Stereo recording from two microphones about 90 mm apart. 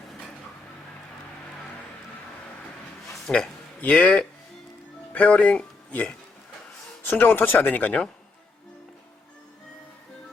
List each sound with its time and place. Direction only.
3.2 s a man's voice: 5° left (ahead or behind)
3.8 s speech: 15° left (ahead or behind)